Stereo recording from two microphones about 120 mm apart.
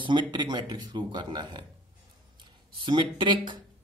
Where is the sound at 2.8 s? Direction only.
40° right (ahead or behind).